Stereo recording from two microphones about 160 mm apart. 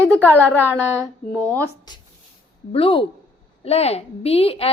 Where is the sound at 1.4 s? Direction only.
20° right (ahead or behind).